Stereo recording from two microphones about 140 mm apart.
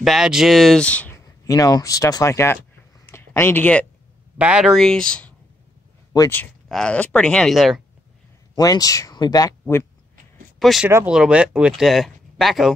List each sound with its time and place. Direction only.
0.0 s speech: centre (ahead or behind)
1.2 s speech: 25° left (ahead or behind)
4.4 s speech: 5° right (ahead or behind)
6.7 s speech: 5° left (ahead or behind)
8.5 s speech: 25° left (ahead or behind)
10.6 s speech: centre (ahead or behind)